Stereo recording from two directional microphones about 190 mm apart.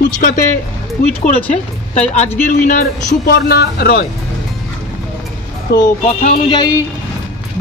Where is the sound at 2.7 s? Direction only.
45° left (ahead or behind).